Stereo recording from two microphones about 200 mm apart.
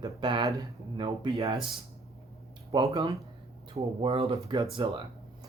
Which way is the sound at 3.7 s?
30° right (ahead or behind).